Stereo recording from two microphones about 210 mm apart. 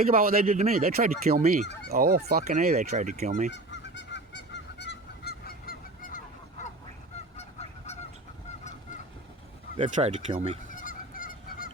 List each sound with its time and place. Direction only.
0.1 s speech: 45° right (ahead or behind)
1.9 s fowl: 45° right (ahead or behind)
3.5 s goose: 55° left (ahead or behind); by 7.9 s 30° left (ahead or behind)
9.7 s fowl: 35° right (ahead or behind)
10.8 s goose: 40° left (ahead or behind)